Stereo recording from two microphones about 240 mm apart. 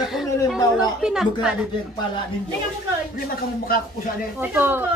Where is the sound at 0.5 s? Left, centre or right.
Centre.